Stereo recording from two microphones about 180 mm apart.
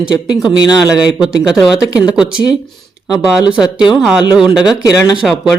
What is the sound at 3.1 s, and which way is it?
Speech, 20° left (ahead or behind).